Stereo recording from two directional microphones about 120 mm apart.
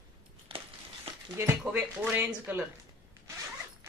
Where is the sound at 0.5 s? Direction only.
45° right (ahead or behind).